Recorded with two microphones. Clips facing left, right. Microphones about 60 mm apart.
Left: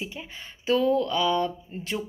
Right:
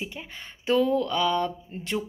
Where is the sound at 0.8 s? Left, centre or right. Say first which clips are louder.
Left 3 dB; left.